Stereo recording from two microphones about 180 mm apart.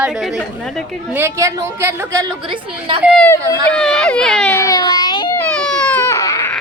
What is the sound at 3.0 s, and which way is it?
Speech, centre (ahead or behind).